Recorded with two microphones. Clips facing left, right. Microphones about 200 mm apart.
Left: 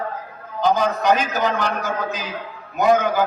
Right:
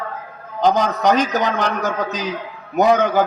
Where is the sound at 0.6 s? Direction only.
65° right (ahead or behind).